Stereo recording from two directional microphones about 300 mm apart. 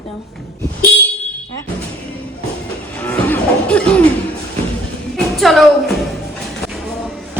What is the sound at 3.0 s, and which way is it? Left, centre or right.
Music, centre.